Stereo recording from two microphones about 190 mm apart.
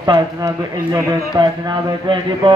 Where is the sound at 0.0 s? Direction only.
20° right (ahead or behind).